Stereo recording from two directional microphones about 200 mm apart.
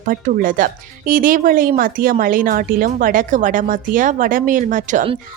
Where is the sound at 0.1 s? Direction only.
45° right (ahead or behind).